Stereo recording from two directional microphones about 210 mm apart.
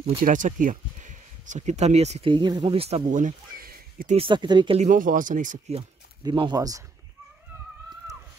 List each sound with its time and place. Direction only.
0.2 s speech: 40° right (ahead or behind)
4.2 s speech: 20° right (ahead or behind)
4.8 s speech: 40° right (ahead or behind)
6.2 s speech: 20° right (ahead or behind)